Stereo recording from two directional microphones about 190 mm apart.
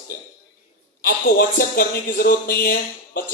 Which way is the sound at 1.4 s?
50° left (ahead or behind).